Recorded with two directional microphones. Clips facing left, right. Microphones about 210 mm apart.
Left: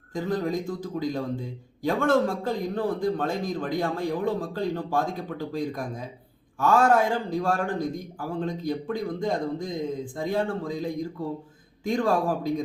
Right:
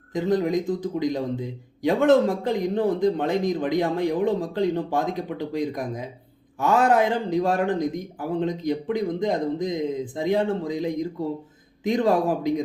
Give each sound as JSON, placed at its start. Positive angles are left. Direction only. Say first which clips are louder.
{"t": 0.1, "sound": "a man's voice", "louder": "right 5 dB", "side_deg": -20}